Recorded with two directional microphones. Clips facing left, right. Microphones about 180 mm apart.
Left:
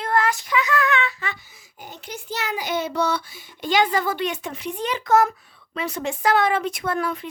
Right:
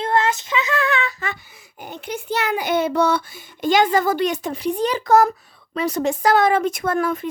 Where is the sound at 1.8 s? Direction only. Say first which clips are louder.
Right 7 dB; 60° right (ahead or behind).